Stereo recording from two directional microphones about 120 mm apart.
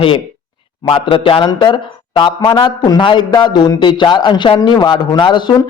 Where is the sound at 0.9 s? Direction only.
45° left (ahead or behind).